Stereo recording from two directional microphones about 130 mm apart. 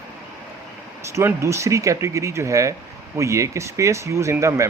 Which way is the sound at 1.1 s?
20° right (ahead or behind).